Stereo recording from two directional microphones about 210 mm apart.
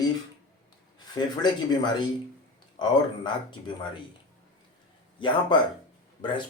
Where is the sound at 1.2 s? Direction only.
20° left (ahead or behind).